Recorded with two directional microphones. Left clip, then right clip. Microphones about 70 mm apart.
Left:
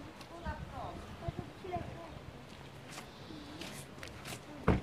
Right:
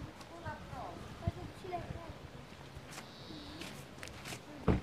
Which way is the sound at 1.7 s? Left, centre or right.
Right.